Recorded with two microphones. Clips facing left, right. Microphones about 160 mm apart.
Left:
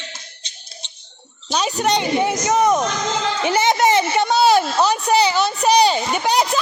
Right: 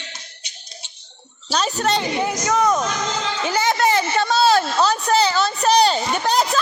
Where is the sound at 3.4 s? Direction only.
20° left (ahead or behind).